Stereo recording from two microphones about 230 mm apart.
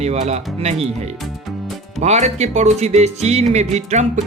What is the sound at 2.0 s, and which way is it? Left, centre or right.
Speech, right.